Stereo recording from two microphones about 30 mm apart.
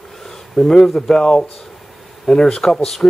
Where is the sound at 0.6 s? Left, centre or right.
Left.